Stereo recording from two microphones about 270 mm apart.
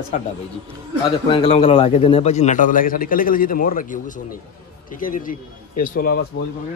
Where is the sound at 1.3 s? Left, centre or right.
Centre.